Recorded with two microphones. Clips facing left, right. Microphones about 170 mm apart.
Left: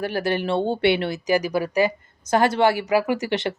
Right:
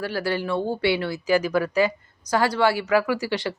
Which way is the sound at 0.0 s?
20° left (ahead or behind).